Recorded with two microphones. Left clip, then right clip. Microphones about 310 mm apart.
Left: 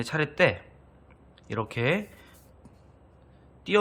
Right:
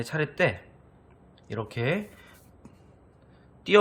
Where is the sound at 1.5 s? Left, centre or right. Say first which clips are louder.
Left 2 dB; centre.